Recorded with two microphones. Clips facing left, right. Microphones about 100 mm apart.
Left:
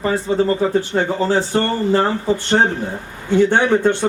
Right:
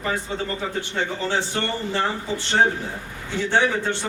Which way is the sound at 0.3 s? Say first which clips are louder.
Left 11 dB; 30° left (ahead or behind).